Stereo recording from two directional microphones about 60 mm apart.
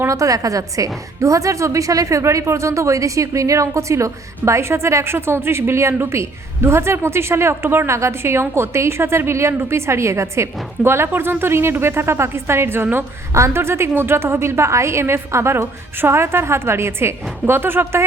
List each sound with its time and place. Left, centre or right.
0.1 s a woman's voice: right
13.3 s a woman's voice: right